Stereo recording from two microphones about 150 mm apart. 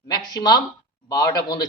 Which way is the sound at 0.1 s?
30° left (ahead or behind).